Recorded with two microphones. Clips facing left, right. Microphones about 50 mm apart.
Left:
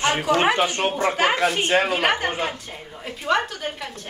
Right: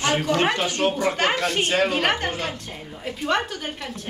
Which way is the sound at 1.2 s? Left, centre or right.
Centre.